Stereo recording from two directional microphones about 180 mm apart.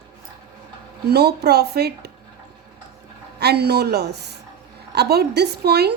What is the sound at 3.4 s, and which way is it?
A woman's voice, 65° right (ahead or behind).